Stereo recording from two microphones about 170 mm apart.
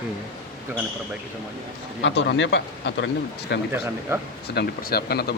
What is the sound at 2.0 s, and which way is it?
Speech, 90° left.